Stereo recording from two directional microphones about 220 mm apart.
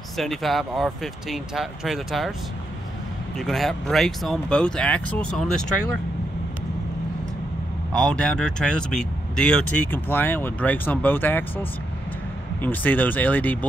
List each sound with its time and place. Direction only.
0.2 s speech: centre (ahead or behind)
3.3 s speech: centre (ahead or behind)
7.9 s speech: 5° left (ahead or behind)
12.6 s speech: 10° left (ahead or behind)